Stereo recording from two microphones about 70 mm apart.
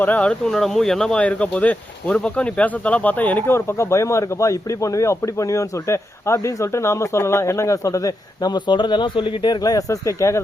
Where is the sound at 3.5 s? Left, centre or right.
Left.